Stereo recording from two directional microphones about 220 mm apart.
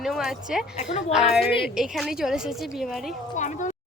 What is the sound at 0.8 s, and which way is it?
Speech, 30° left (ahead or behind).